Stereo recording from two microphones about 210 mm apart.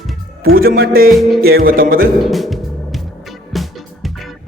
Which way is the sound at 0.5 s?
45° right (ahead or behind).